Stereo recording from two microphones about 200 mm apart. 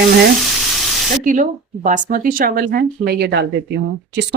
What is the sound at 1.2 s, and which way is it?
Speech, 40° right (ahead or behind).